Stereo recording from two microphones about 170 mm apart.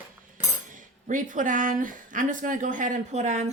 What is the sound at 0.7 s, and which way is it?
Speech, 50° right (ahead or behind).